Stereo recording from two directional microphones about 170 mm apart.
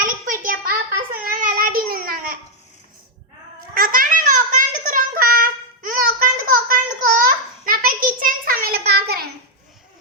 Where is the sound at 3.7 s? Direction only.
55° right (ahead or behind).